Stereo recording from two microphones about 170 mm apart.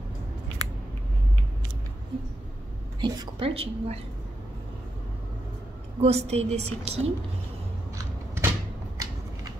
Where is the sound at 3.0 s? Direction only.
30° right (ahead or behind).